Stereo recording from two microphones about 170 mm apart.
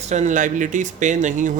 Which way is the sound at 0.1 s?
45° right (ahead or behind).